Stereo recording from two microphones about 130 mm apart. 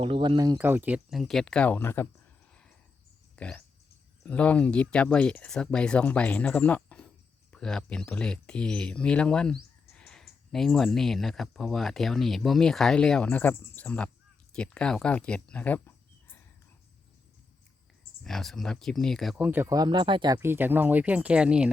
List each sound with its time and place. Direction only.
0.0 s speech: 40° right (ahead or behind)
0.3 s speech: 30° right (ahead or behind)
0.6 s speech: 15° right (ahead or behind)
1.1 s speech: centre (ahead or behind); by 2.0 s 20° left (ahead or behind)
3.3 s a sound: 10° left (ahead or behind)
4.2 s speech: 10° left (ahead or behind)
18.2 s speech: 5° left (ahead or behind)
19.4 s speech: 15° right (ahead or behind)
19.7 s speech: 35° right (ahead or behind)
20.4 s speech: 15° right (ahead or behind)